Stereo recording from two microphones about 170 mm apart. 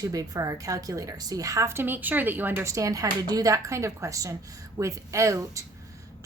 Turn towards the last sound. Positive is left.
turn(degrees=-20)  # may be behind; listen again after turning